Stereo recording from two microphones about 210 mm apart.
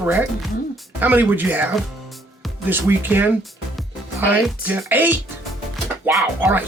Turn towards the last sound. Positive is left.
turn(degrees=-10)  # may be behind; listen again after turning